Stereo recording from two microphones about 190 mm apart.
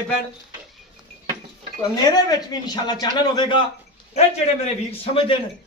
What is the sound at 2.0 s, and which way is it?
Speech, 20° left (ahead or behind).